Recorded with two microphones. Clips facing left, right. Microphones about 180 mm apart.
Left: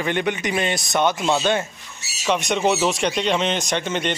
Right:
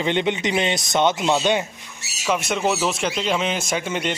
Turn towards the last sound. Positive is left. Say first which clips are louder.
# left 1 dB
turn(degrees=-5)  # may be behind; listen again after turning